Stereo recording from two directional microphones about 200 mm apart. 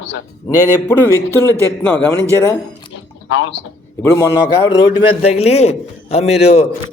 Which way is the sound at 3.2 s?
70° left (ahead or behind).